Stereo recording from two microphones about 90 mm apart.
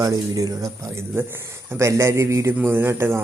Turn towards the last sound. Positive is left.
turn(degrees=-25)  # may be behind; listen again after turning